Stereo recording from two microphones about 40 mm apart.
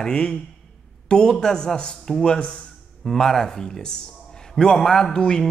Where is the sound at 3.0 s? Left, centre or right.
Centre.